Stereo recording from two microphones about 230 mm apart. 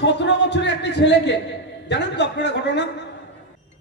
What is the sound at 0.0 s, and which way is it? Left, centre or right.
Speech, left.